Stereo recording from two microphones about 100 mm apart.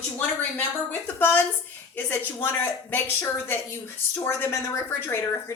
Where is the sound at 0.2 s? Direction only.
15° left (ahead or behind).